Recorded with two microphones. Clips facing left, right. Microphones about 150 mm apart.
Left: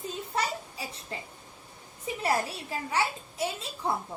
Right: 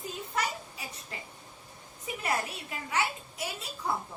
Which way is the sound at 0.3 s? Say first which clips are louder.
Left 2 dB; 30° left (ahead or behind).